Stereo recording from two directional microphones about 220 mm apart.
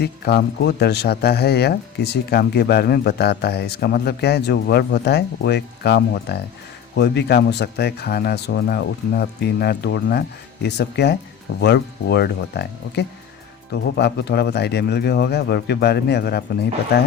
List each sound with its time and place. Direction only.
0.0 s speech: 50° left (ahead or behind)